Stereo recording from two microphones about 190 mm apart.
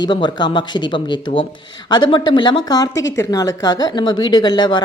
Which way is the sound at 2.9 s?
75° left (ahead or behind).